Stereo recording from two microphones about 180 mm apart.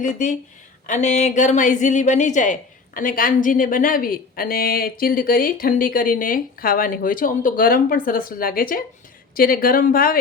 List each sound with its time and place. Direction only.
0.0 s a woman's voice: 45° left (ahead or behind)